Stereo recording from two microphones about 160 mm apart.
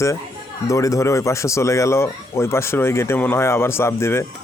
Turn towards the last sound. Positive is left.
turn(degrees=15)  # may be behind; listen again after turning